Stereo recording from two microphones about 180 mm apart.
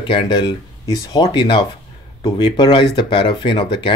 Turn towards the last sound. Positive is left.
turn(degrees=30)  # may be behind; listen again after turning